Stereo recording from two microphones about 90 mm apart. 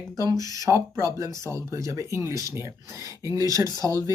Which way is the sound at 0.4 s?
40° right (ahead or behind).